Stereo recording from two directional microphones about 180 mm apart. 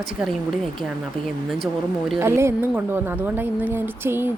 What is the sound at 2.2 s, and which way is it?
A woman's voice, 15° right (ahead or behind).